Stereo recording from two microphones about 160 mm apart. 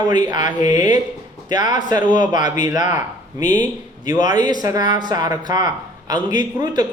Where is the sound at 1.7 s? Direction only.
25° right (ahead or behind).